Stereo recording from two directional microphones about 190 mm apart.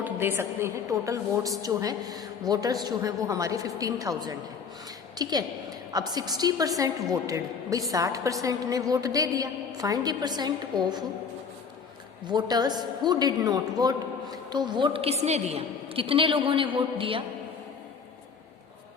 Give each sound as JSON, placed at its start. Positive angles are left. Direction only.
{"t": 0.0, "sound": "a woman's voice", "side_deg": -10}
{"t": 12.2, "sound": "a woman's voice", "side_deg": -20}